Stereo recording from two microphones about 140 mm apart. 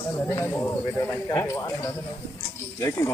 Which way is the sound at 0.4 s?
20° left (ahead or behind).